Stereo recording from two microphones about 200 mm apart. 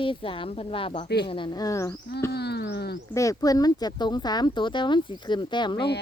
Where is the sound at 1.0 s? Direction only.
55° left (ahead or behind).